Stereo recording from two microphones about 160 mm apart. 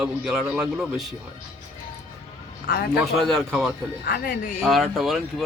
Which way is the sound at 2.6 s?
75° left (ahead or behind).